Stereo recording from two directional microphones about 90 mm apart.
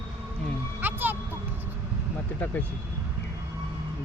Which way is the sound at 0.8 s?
20° right (ahead or behind).